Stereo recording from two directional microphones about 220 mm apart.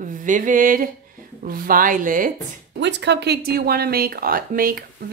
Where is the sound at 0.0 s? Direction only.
35° right (ahead or behind).